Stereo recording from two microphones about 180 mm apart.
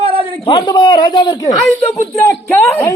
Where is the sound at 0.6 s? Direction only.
25° left (ahead or behind).